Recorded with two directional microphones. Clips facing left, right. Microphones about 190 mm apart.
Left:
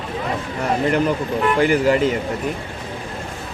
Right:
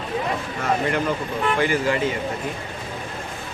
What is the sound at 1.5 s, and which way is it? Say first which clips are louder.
Speech: left 6 dB; 45° left (ahead or behind).